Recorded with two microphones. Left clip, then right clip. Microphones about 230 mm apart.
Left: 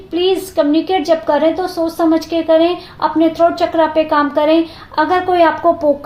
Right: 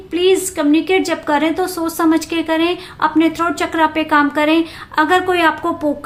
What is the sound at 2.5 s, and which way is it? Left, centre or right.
A woman's voice, right.